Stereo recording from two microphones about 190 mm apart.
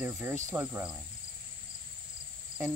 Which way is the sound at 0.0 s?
10° right (ahead or behind).